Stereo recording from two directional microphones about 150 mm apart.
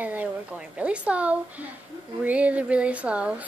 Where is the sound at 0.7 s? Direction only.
10° right (ahead or behind).